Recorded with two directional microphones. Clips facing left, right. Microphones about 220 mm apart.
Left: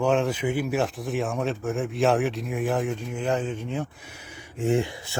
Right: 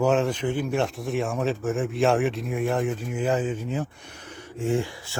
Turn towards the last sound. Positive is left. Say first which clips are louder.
# left 2 dB
turn(degrees=20)  # may be behind; listen again after turning